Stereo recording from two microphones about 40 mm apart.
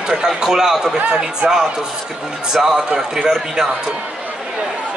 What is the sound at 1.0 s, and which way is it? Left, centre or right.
Speech, right.